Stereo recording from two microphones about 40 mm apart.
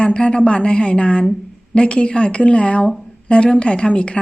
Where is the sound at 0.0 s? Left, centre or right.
Left.